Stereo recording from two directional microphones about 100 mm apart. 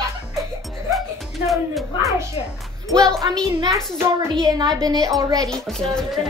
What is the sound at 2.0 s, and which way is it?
Speech, 35° right (ahead or behind).